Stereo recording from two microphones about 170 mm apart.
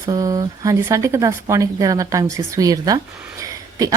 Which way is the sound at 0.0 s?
20° right (ahead or behind).